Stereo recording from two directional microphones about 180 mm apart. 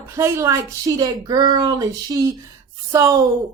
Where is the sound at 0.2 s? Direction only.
15° right (ahead or behind).